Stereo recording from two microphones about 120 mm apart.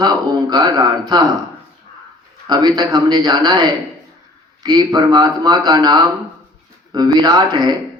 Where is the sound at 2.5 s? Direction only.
35° right (ahead or behind).